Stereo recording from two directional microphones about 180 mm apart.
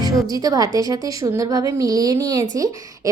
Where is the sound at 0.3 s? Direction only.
20° right (ahead or behind).